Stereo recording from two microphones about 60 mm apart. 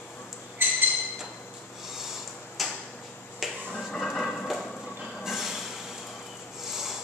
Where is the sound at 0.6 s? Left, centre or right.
Right.